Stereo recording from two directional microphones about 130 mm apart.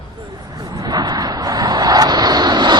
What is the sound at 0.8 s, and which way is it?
Vehicle, 30° right (ahead or behind).